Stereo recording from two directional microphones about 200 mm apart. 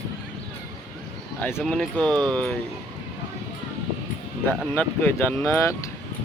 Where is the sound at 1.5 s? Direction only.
Centre (ahead or behind).